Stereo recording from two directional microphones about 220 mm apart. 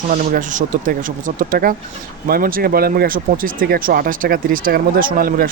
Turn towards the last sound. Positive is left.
turn(degrees=-40)  # may be behind; listen again after turning